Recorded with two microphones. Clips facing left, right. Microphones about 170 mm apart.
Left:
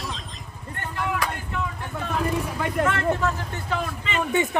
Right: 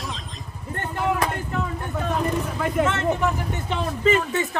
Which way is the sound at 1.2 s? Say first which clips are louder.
Right 3 dB; 40° right (ahead or behind).